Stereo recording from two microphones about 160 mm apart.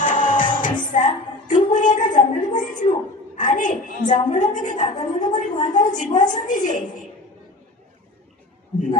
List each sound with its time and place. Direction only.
0.0 s music: 55° left (ahead or behind)
2.7 s a sound: 50° left (ahead or behind)
4.3 s a woman's voice: 50° left (ahead or behind)